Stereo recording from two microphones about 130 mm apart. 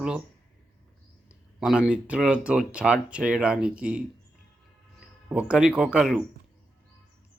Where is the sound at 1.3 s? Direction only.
5° right (ahead or behind).